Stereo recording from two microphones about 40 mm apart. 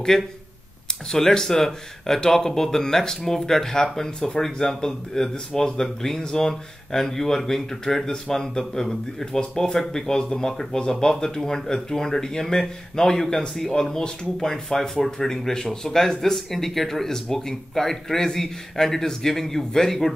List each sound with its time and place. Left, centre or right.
0.1 s speech: centre